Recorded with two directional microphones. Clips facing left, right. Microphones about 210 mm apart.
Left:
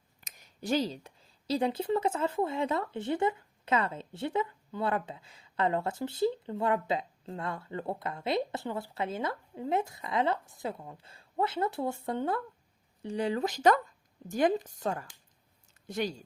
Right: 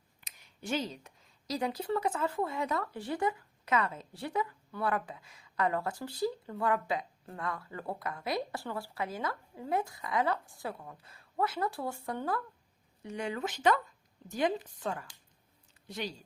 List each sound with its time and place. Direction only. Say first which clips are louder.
0.2 s speech: left 4 dB; 40° left (ahead or behind)